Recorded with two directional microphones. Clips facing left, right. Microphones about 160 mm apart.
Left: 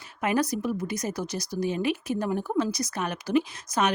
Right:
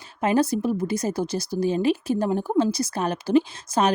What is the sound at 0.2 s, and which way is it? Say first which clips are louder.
Speech: right 5 dB; 30° right (ahead or behind).